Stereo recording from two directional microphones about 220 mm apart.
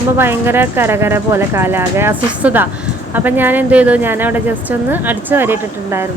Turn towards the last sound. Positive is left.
turn(degrees=-10)  # may be behind; listen again after turning